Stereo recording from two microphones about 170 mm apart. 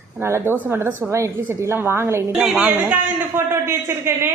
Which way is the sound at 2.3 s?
5° right (ahead or behind).